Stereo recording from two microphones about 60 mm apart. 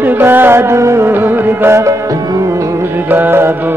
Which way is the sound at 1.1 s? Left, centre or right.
Right.